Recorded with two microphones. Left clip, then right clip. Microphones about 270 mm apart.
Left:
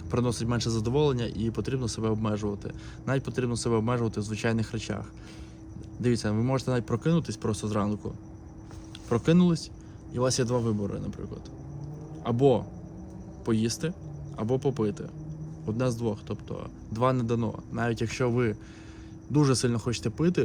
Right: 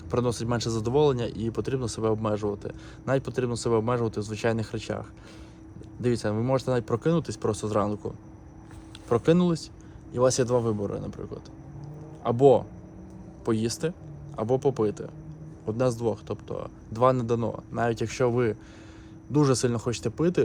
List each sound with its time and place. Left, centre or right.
0.1 s speech: centre